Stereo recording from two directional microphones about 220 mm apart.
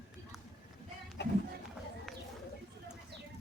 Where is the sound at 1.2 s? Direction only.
50° left (ahead or behind).